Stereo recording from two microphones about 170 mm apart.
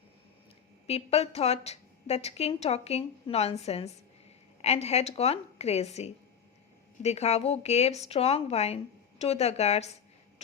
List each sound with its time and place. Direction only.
0.9 s a woman's voice: 35° left (ahead or behind)